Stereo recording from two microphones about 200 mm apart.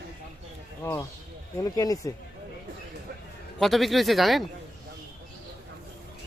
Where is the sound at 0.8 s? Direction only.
15° left (ahead or behind).